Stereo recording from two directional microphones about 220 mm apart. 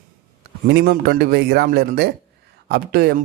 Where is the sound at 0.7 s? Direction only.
50° right (ahead or behind).